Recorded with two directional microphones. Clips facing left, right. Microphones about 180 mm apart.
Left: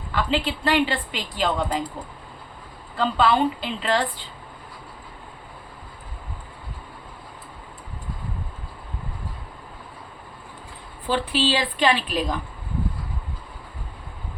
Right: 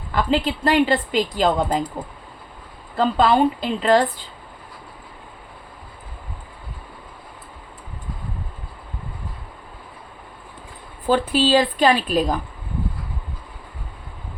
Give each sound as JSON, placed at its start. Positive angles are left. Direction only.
{"t": 0.1, "sound": "a woman's voice", "side_deg": -40}
{"t": 3.0, "sound": "a woman's voice", "side_deg": -40}
{"t": 11.0, "sound": "a woman's voice", "side_deg": -45}